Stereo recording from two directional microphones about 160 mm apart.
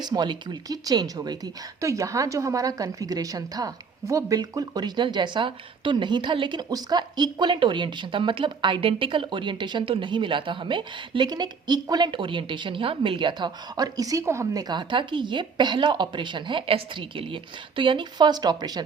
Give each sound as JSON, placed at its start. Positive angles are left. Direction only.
{"t": 0.0, "sound": "a woman's voice", "side_deg": -25}